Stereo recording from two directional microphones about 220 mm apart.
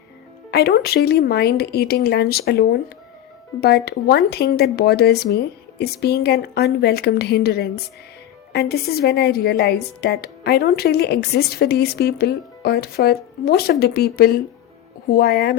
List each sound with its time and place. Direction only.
0.5 s a woman's voice: 45° left (ahead or behind)